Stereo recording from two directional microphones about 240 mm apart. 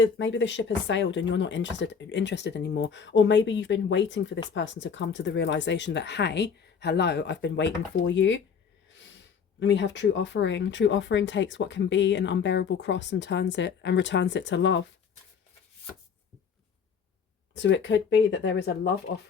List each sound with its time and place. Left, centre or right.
0.0 s speech: left
9.6 s speech: left
17.5 s speech: left